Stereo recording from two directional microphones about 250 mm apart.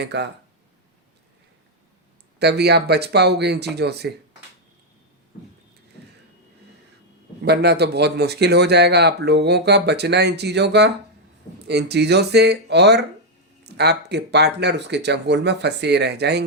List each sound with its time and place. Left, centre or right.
0.0 s speech: right
2.4 s speech: right
7.4 s speech: right